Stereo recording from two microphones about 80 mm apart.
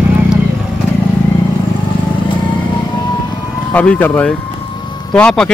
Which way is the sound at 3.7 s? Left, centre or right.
Centre.